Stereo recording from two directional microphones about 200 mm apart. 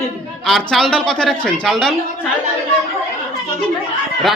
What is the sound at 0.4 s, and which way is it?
Speech, centre (ahead or behind).